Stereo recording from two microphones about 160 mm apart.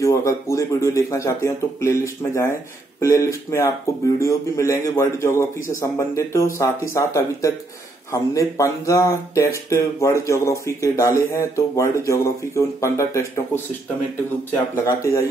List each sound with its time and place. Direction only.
0.0 s a man's voice: 20° left (ahead or behind)
14.5 s a man's voice: 20° left (ahead or behind)